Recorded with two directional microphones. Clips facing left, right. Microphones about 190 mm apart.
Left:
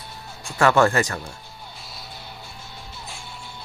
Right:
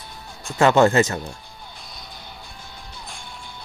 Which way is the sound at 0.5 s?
20° right (ahead or behind).